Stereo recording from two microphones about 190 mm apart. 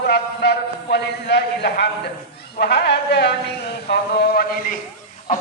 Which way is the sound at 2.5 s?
60° left (ahead or behind).